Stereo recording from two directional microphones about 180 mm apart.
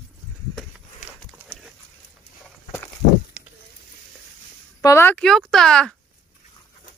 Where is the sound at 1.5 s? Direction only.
Centre (ahead or behind).